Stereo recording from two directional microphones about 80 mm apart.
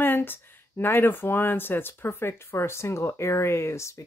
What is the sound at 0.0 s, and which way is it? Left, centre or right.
Speech, left.